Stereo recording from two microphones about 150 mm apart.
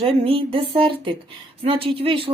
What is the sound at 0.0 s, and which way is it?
A woman's voice, 40° right (ahead or behind).